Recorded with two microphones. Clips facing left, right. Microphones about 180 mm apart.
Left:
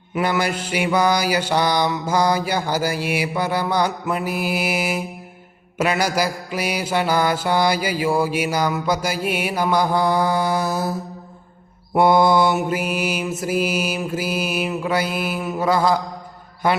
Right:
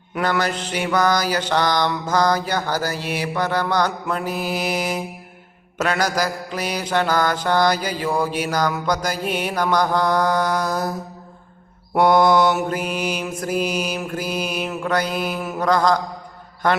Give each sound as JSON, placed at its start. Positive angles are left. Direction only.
{"t": 0.1, "sound": "mantra", "side_deg": 10}
{"t": 11.9, "sound": "mantra", "side_deg": 5}